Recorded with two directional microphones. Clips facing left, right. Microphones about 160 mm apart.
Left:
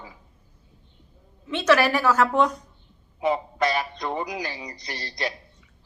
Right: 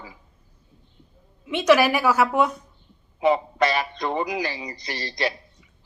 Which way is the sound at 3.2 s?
85° right.